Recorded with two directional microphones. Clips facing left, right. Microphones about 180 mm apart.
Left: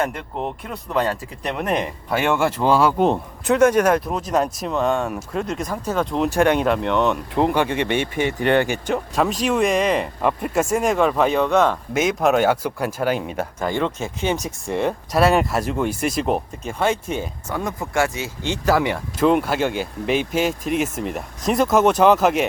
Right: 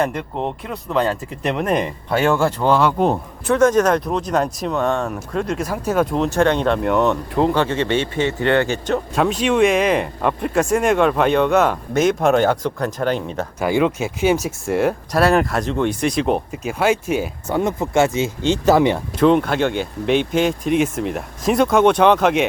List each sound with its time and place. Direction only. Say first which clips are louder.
0.0 s speech: right 3 dB; centre (ahead or behind)
6.2 s speech: right 1 dB; 10° left (ahead or behind)
6.8 s speech: right 2 dB; 5° right (ahead or behind)
7.3 s speech: right 1 dB; 15° left (ahead or behind)
9.1 s speech: right 3 dB; centre (ahead or behind)
13.6 s speech: right 6 dB; 10° right (ahead or behind)
17.5 s speech: right 6 dB; 25° right (ahead or behind)
19.2 s speech: right 3 dB; 5° left (ahead or behind)